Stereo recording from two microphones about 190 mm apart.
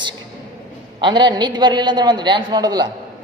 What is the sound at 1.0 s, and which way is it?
A man's voice, 25° right (ahead or behind).